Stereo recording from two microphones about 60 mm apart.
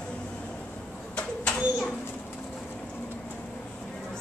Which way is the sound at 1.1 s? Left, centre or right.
Centre.